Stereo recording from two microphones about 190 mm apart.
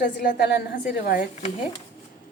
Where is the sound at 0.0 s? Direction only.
55° left (ahead or behind).